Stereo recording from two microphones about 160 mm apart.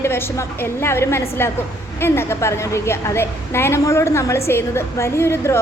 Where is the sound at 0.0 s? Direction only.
15° left (ahead or behind).